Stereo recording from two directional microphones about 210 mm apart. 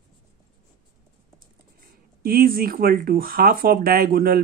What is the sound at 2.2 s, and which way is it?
Speech, 45° right (ahead or behind).